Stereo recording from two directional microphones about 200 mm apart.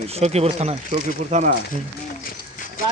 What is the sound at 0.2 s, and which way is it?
Speech, 30° right (ahead or behind).